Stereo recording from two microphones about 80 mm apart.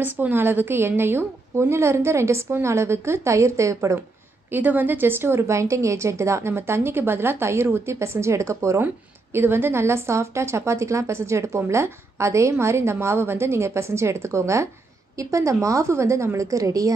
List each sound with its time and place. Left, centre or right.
0.0 s a woman's voice: right
4.5 s a woman's voice: right